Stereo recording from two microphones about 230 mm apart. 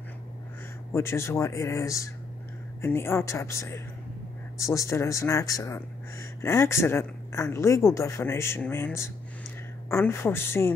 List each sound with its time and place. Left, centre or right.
0.9 s speech: centre